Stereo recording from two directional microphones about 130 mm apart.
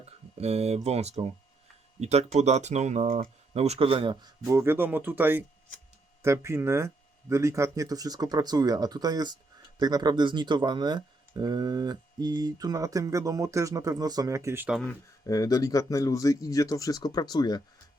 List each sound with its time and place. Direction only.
0.3 s speech: 55° right (ahead or behind); by 3.2 s 70° right (ahead or behind)
3.5 s speech: 55° right (ahead or behind); by 4.3 s 40° right (ahead or behind)
4.4 s speech: 20° right (ahead or behind)
15.3 s speech: 30° left (ahead or behind)